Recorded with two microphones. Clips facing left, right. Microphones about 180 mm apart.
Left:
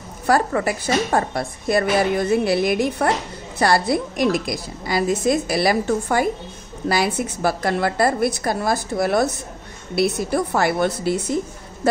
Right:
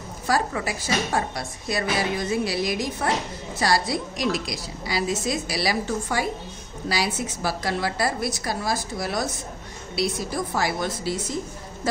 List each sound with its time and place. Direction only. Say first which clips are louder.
0.3 s a woman's voice: left 6 dB; 55° left (ahead or behind)